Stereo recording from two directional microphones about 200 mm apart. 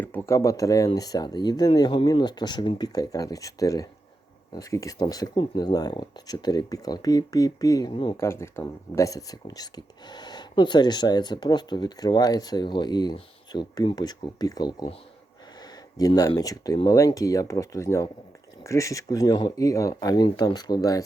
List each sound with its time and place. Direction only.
0.0 s speech: 10° left (ahead or behind)